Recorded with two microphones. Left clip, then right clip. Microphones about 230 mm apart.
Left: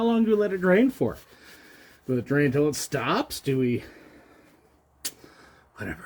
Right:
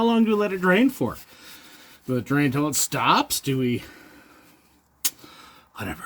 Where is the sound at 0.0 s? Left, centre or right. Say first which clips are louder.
Right 2 dB; right.